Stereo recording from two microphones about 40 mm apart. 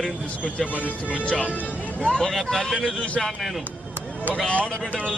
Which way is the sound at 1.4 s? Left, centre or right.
Left.